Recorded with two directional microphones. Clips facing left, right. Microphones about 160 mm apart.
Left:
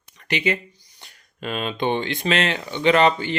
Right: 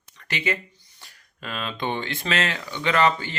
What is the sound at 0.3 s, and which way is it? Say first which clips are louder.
Speech: left 4 dB; 20° left (ahead or behind).